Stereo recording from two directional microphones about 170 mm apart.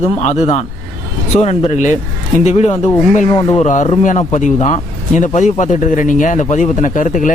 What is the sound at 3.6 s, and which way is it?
Speech, 45° left (ahead or behind).